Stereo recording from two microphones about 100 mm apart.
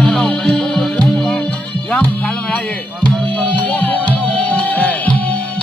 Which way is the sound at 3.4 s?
15° left (ahead or behind).